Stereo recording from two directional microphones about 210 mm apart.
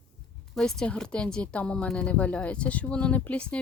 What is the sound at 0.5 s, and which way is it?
A woman's voice, 5° left (ahead or behind).